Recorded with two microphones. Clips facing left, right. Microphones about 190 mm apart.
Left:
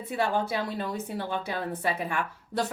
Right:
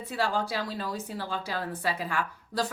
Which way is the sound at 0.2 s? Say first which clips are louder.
Left 2 dB; 20° left (ahead or behind).